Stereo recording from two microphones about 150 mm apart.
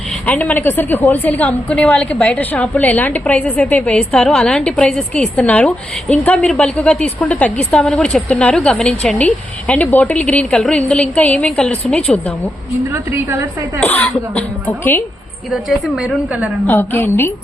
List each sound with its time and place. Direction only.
0.3 s a woman's voice: 10° left (ahead or behind)
12.9 s a woman's voice: 15° right (ahead or behind)
13.8 s a woman's voice: 10° left (ahead or behind)
15.7 s a woman's voice: 5° right (ahead or behind)
16.6 s a woman's voice: 15° left (ahead or behind)